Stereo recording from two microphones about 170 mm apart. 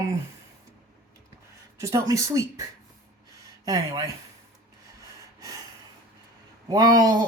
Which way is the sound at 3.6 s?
20° right (ahead or behind).